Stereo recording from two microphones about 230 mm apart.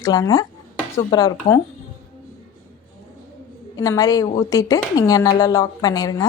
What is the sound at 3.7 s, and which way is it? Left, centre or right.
A woman's voice, centre.